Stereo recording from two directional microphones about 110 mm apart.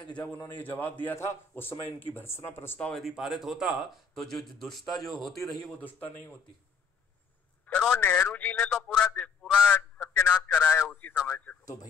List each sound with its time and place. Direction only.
0.6 s a man's voice: 15° left (ahead or behind)
2.9 s speech: centre (ahead or behind)
5.8 s speech: 15° left (ahead or behind)
7.6 s a man's voice: 10° left (ahead or behind)